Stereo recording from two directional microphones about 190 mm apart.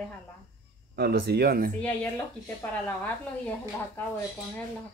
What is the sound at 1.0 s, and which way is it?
Speech, 60° right (ahead or behind).